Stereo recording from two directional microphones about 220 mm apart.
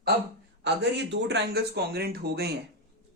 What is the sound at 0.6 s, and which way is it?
Speech, 50° right (ahead or behind).